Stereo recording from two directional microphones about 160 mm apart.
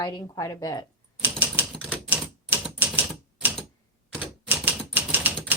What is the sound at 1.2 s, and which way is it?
Typewriter, 10° right (ahead or behind).